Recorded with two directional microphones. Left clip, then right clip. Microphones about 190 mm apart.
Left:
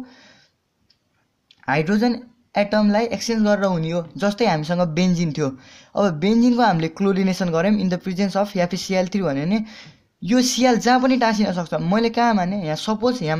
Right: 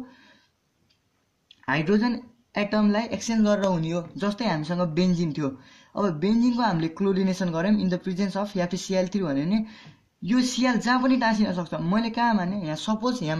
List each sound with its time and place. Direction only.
1.5 s speech: 50° left (ahead or behind)